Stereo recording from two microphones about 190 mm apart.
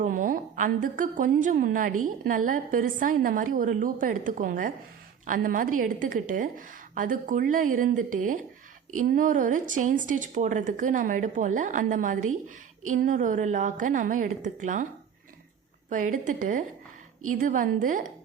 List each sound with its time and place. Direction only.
0.0 s a woman's voice: 45° right (ahead or behind)
15.9 s a woman's voice: 45° right (ahead or behind)